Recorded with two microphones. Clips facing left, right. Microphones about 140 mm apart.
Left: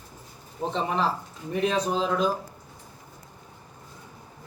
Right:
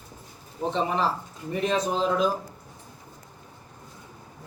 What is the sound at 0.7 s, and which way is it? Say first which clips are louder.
A man's voice: even; centre (ahead or behind).